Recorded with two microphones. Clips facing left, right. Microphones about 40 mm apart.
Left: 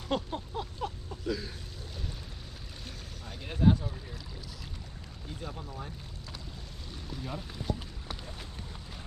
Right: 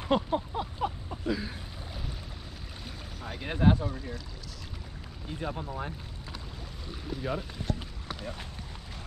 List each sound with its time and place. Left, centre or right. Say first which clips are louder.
0.1 s a sound: right 6 dB; centre
3.4 s speech: right 1 dB; right
5.3 s speech: right 7 dB; right
6.9 s speech: right 6 dB; centre